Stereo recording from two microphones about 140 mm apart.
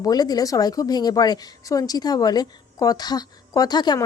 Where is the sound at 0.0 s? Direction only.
30° left (ahead or behind).